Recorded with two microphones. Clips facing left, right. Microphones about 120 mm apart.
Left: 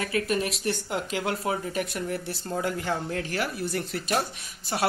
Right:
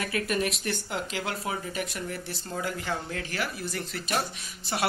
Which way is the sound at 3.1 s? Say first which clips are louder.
Left 4 dB; 45° left (ahead or behind).